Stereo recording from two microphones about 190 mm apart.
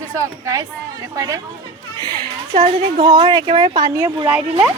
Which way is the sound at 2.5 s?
25° right (ahead or behind).